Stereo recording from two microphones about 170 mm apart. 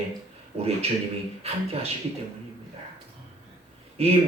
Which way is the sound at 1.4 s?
35° right (ahead or behind).